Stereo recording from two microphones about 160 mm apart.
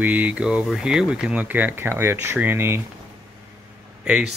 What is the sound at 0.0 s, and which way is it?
Speech, 10° right (ahead or behind).